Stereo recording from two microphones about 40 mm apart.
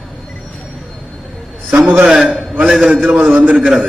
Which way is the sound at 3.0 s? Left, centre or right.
Right.